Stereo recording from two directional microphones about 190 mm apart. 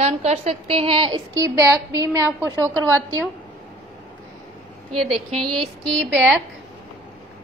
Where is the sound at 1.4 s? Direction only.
15° right (ahead or behind).